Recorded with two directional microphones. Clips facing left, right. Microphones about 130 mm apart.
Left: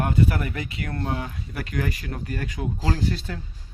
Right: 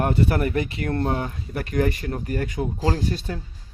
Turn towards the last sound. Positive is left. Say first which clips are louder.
# right 2 dB
turn(degrees=-25)  # may be behind; listen again after turning